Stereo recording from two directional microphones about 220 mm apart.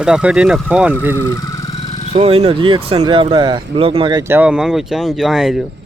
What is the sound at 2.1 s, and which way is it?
Speech, 25° right (ahead or behind).